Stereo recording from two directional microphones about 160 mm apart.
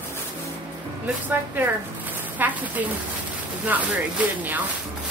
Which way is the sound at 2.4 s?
10° right (ahead or behind).